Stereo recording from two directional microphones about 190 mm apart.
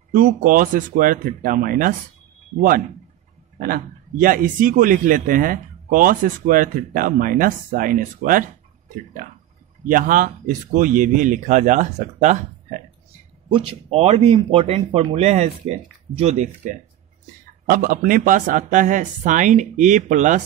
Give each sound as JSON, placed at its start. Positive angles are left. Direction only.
{"t": 0.1, "sound": "a man's voice", "side_deg": -45}
{"t": 3.5, "sound": "a man's voice", "side_deg": -45}
{"t": 17.6, "sound": "speech", "side_deg": -50}